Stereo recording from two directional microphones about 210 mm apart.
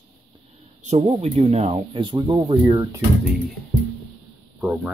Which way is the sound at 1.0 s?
30° right (ahead or behind).